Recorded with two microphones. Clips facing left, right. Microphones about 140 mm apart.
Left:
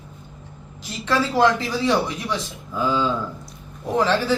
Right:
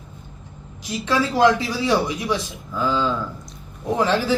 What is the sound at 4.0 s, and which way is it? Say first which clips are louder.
Speech: even; 15° right (ahead or behind).